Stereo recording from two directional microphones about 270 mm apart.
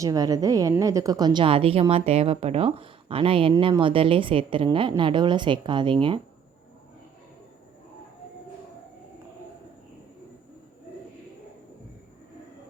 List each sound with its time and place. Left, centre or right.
0.0 s a woman's voice: centre